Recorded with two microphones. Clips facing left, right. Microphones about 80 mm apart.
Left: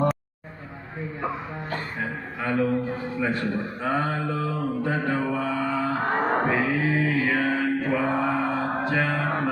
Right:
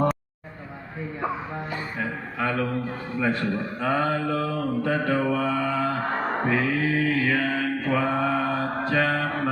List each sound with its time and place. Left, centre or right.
2.0 s speech: centre
5.1 s mantra: centre